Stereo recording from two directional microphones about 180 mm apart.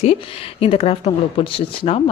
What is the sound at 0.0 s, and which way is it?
Speech, 35° left (ahead or behind).